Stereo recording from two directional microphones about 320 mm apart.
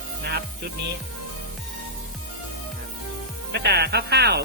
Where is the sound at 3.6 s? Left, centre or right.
Right.